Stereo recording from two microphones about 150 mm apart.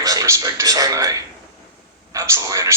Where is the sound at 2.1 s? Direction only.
20° right (ahead or behind).